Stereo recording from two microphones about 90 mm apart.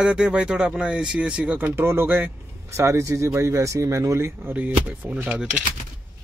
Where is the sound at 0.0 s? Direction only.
10° right (ahead or behind).